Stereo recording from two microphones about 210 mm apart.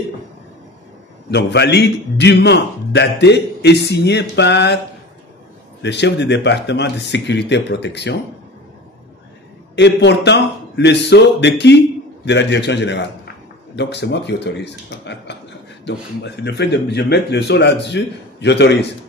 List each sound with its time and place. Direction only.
1.3 s a man's voice: 55° left (ahead or behind)
5.8 s a man's voice: 55° left (ahead or behind)
9.8 s a man's voice: 55° left (ahead or behind)